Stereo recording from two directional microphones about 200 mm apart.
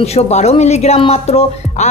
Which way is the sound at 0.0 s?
30° left (ahead or behind).